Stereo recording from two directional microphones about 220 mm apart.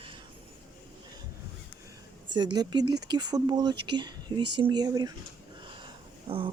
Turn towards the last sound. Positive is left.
turn(degrees=-25)  # may be behind; listen again after turning